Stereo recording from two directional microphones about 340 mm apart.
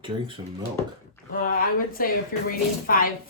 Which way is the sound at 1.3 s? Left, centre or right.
Left.